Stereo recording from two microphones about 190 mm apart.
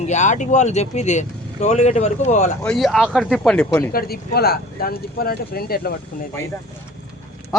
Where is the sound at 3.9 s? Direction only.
55° left (ahead or behind).